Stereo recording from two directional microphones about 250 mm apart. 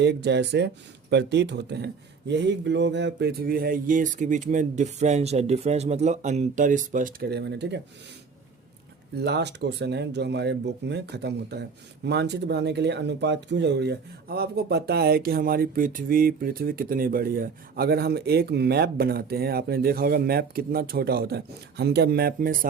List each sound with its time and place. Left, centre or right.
0.0 s speech: right
9.1 s speech: right